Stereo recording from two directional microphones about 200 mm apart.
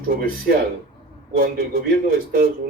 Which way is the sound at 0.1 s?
45° right (ahead or behind).